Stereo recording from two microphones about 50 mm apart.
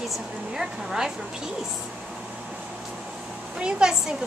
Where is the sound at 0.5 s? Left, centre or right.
Centre.